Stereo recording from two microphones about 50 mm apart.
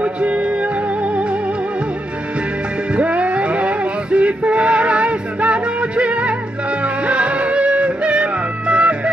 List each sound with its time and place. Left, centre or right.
0.0 s music: right
2.9 s music: right